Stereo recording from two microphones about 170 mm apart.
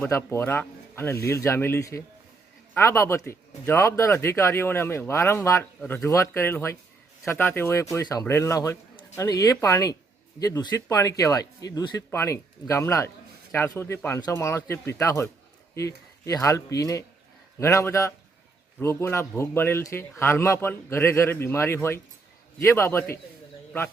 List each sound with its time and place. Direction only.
0.0 s a man's voice: 15° left (ahead or behind)